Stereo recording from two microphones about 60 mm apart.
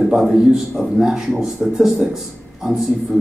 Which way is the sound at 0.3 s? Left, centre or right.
Centre.